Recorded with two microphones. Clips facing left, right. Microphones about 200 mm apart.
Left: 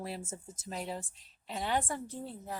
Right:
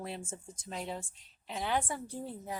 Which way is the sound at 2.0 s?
15° right (ahead or behind).